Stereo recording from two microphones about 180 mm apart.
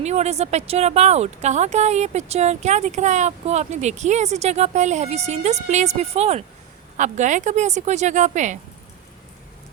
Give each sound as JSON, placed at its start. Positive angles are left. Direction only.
{"t": 0.0, "sound": "speech", "side_deg": -35}